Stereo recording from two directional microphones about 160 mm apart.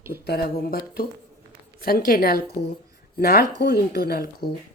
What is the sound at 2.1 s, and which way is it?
Speech, 70° left (ahead or behind).